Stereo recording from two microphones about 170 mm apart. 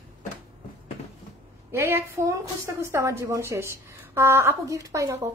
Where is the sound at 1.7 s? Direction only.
15° right (ahead or behind).